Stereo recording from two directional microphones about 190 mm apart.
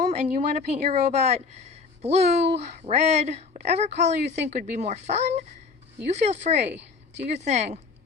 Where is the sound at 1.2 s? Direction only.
35° right (ahead or behind).